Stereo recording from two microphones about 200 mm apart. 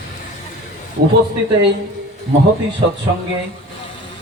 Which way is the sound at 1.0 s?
60° right (ahead or behind).